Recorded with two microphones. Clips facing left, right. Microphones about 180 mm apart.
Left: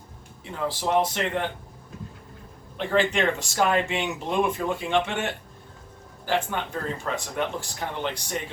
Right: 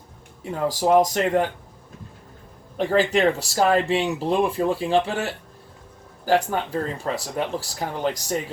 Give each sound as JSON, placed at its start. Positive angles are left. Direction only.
{"t": 0.7, "sound": "speech", "side_deg": -40}
{"t": 2.7, "sound": "speech", "side_deg": -40}